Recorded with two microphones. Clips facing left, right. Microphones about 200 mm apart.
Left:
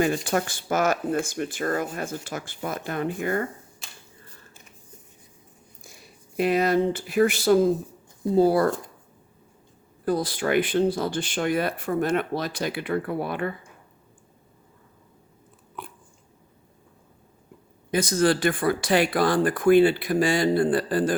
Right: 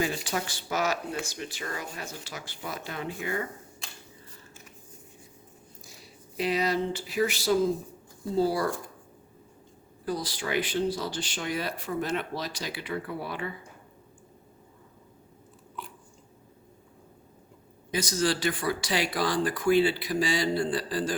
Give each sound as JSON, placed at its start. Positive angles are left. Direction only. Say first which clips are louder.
{"t": 0.3, "sound": "speech", "louder": "left 7 dB", "side_deg": 50}
{"t": 5.8, "sound": "speech", "louder": "left 3 dB", "side_deg": 55}
{"t": 10.1, "sound": "speech", "louder": "left 7 dB", "side_deg": 55}
{"t": 15.8, "sound": "biting", "louder": "left 2 dB", "side_deg": 55}
{"t": 17.9, "sound": "speech", "louder": "left 6 dB", "side_deg": 55}